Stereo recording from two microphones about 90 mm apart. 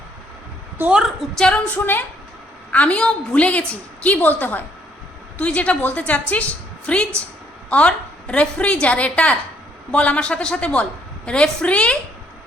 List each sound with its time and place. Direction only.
1.4 s a woman's voice: 10° left (ahead or behind)